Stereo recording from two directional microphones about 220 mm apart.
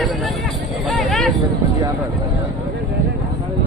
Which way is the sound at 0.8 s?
Centre (ahead or behind).